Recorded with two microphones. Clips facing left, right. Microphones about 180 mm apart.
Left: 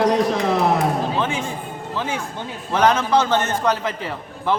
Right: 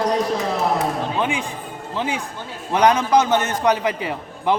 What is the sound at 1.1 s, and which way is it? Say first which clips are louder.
A man's voice: even; 15° right (ahead or behind).